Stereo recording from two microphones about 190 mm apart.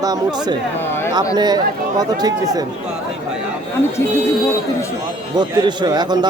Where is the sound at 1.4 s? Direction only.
20° right (ahead or behind).